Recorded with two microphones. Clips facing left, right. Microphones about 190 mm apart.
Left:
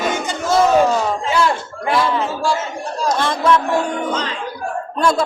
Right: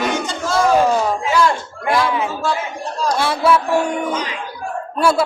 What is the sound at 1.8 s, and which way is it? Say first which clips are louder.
Speech: even; 10° right (ahead or behind).